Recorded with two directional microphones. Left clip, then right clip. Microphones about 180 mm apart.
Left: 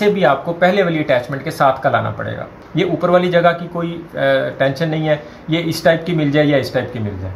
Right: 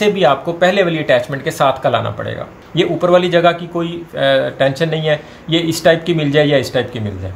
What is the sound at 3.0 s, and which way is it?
A man's voice, 40° right (ahead or behind).